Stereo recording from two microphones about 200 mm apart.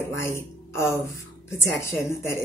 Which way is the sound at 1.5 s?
15° left (ahead or behind).